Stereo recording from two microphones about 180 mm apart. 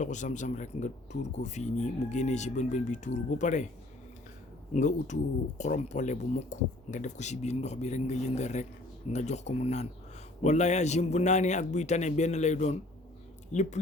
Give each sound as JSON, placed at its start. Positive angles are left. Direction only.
{"t": 0.0, "sound": "speech", "side_deg": 40}
{"t": 4.7, "sound": "speech", "side_deg": 40}